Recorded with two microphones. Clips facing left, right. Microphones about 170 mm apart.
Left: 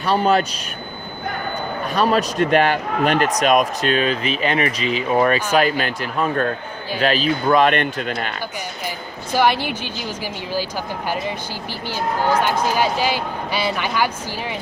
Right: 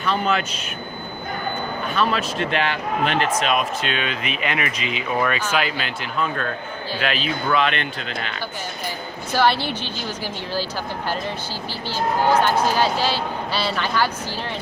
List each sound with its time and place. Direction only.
0.0 s speech: 35° left (ahead or behind)
1.9 s speech: 40° left (ahead or behind)
9.3 s speech: 15° left (ahead or behind)
12.7 s speech: 15° left (ahead or behind)